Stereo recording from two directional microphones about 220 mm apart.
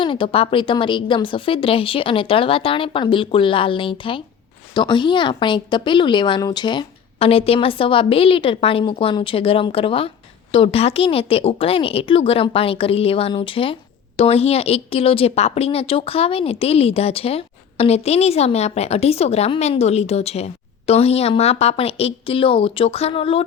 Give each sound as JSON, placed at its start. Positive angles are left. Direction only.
{"t": 0.0, "sound": "a woman's voice", "side_deg": 20}